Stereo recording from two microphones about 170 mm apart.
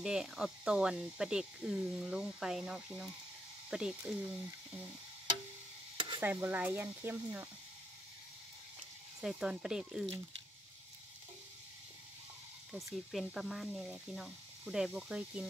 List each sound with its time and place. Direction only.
0.0 s speech: 5° right (ahead or behind)
5.9 s stir: 30° right (ahead or behind)
6.2 s speech: 10° right (ahead or behind)
9.2 s speech: 5° right (ahead or behind)
12.7 s speech: centre (ahead or behind)